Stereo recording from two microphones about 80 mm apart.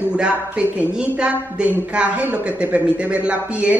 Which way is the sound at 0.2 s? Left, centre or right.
Centre.